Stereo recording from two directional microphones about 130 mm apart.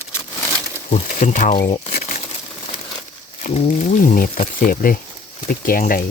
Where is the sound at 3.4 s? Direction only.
60° left (ahead or behind).